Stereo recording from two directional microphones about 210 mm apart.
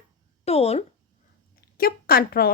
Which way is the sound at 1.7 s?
45° left (ahead or behind).